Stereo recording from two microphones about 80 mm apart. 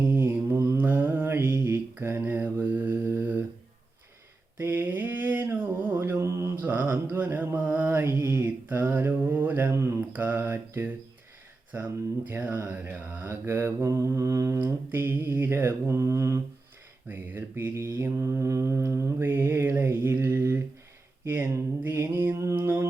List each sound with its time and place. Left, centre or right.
0.2 s mantra: right
0.8 s mantra: right
4.6 s mantra: right
5.5 s a sound: right
6.1 s mantra: right
6.6 s mantra: right
9.7 s mantra: right
10.1 s mantra: right
12.3 s mantra: right
14.6 s mantra: right
21.8 s mantra: right